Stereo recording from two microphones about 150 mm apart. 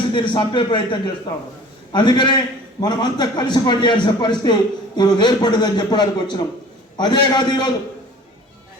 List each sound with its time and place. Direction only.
0.1 s a man's voice: 30° left (ahead or behind)